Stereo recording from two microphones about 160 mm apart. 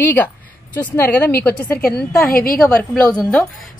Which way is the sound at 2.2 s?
65° left (ahead or behind).